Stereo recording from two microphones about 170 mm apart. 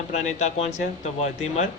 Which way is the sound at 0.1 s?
40° left (ahead or behind).